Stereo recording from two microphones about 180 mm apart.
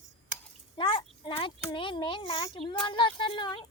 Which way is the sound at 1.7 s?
25° left (ahead or behind).